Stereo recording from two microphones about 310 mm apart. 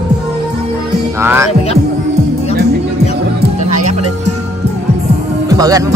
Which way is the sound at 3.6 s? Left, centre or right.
Right.